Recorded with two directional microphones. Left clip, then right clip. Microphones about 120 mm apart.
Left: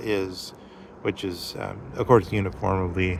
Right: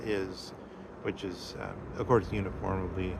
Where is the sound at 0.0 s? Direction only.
60° left (ahead or behind).